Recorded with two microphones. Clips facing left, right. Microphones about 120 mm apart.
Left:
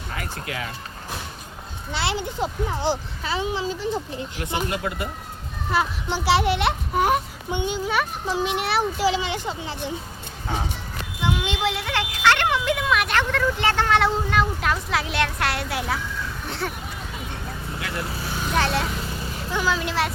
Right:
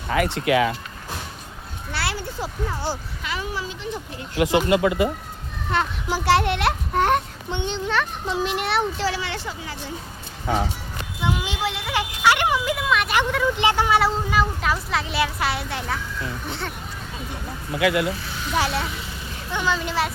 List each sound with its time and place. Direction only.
0.1 s speech: 90° right
1.9 s speech: 20° left (ahead or behind)
4.4 s speech: 90° right
5.7 s a child's voice: centre (ahead or behind)
9.0 s speech: 15° left (ahead or behind)
11.2 s a child's voice: centre (ahead or behind)
11.9 s speech: 10° right (ahead or behind)
13.1 s a child's voice: 10° right (ahead or behind)
17.7 s speech: 90° right
18.5 s a child's voice: 5° right (ahead or behind)